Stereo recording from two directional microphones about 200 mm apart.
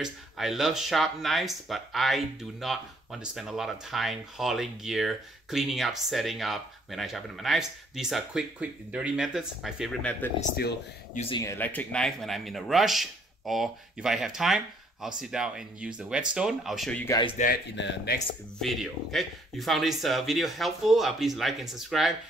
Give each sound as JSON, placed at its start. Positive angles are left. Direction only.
{"t": 0.0, "sound": "speech", "side_deg": 0}
{"t": 11.1, "sound": "speech", "side_deg": 25}
{"t": 11.4, "sound": "speech", "side_deg": 10}
{"t": 17.0, "sound": "speech", "side_deg": 15}
{"t": 17.7, "sound": "speech", "side_deg": 60}
{"t": 18.6, "sound": "speech", "side_deg": 0}